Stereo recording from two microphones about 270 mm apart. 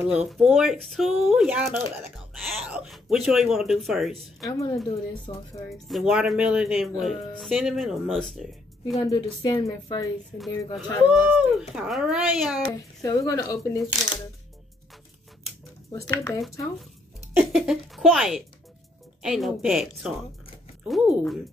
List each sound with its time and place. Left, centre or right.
0.3 s speech: centre
4.5 s a woman's voice: centre
5.9 s speech: centre
8.9 s a woman's voice: centre
10.8 s speech: centre
13.0 s a woman's voice: centre
15.9 s speech: centre